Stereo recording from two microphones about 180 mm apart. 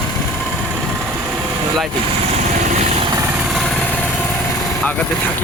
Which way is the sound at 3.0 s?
20° right (ahead or behind).